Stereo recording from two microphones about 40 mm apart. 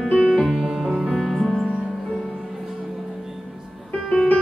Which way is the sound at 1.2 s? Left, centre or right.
Centre.